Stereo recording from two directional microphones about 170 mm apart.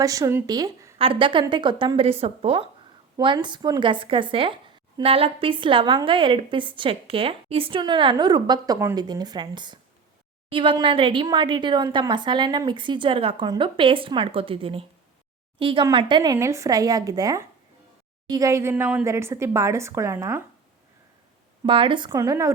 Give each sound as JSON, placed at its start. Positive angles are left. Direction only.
{"t": 0.0, "sound": "speech", "side_deg": -20}
{"t": 0.9, "sound": "a woman's voice", "side_deg": -30}
{"t": 21.6, "sound": "a woman's voice", "side_deg": -30}